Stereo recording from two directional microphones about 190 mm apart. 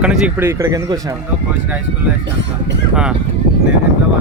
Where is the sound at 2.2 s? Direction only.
70° right (ahead or behind).